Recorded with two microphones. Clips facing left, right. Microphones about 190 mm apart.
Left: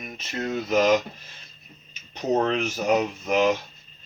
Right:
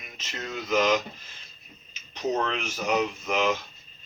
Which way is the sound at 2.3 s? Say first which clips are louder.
Left 6 dB; 35° left (ahead or behind).